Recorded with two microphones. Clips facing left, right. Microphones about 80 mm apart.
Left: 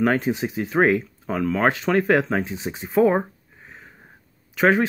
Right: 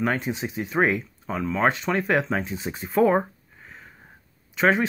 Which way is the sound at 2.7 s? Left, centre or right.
Centre.